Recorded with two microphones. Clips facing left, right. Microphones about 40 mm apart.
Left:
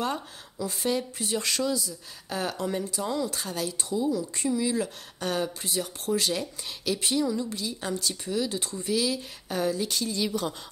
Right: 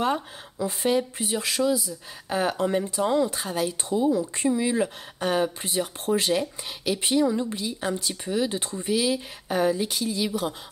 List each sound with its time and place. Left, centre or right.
0.0 s speech: right